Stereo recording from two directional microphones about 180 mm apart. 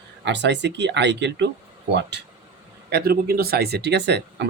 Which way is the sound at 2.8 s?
60° right (ahead or behind).